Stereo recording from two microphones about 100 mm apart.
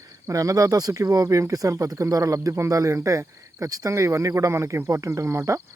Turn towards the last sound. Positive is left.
turn(degrees=-30)  # may be behind; listen again after turning